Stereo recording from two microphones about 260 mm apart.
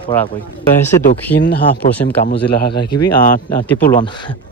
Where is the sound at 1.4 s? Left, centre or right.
Left.